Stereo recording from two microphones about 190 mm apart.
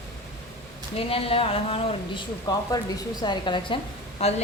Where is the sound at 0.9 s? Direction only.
30° left (ahead or behind).